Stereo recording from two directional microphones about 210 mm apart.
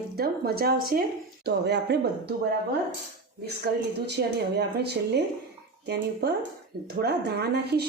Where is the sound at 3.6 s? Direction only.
50° right (ahead or behind).